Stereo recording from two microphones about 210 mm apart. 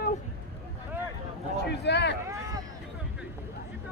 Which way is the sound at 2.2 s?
15° right (ahead or behind).